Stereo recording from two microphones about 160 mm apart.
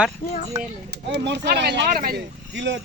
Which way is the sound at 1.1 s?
90° right.